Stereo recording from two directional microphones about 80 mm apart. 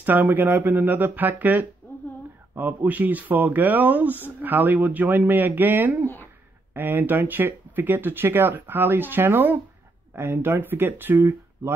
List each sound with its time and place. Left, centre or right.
0.0 s speech: right